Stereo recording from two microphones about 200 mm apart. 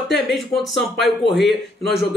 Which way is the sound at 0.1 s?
Centre (ahead or behind).